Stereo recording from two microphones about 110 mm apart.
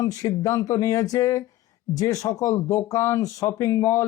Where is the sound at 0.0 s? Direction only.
35° left (ahead or behind).